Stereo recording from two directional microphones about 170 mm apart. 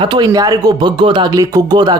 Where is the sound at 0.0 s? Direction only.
25° right (ahead or behind).